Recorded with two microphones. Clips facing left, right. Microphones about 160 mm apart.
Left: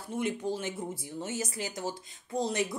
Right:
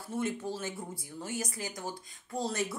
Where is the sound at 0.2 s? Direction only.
20° left (ahead or behind).